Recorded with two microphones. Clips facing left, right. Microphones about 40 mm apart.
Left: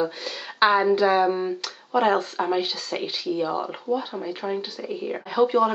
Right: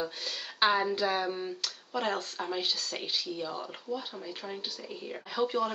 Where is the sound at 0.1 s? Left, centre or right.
Centre.